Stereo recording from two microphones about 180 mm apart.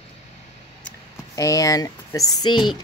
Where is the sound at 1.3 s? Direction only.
20° left (ahead or behind).